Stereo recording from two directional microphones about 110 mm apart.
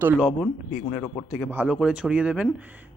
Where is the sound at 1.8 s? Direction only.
10° right (ahead or behind).